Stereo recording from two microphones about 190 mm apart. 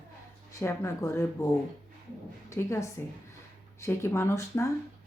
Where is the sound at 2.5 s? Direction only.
15° left (ahead or behind).